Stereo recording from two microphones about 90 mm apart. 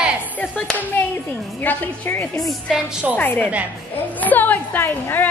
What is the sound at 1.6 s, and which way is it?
A woman's voice, 20° left (ahead or behind).